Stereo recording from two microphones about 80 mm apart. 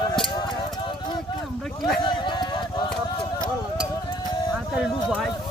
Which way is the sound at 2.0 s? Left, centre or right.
Left.